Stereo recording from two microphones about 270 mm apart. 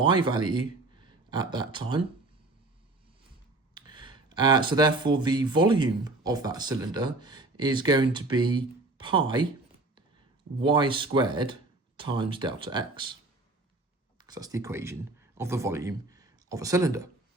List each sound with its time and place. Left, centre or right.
0.0 s speech: centre
3.8 s speech: centre
10.6 s speech: centre
14.2 s speech: centre